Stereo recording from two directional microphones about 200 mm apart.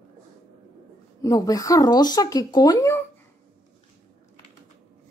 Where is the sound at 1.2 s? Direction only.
15° left (ahead or behind).